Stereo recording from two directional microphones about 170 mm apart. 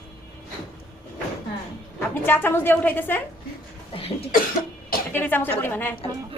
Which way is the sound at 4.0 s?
35° left (ahead or behind).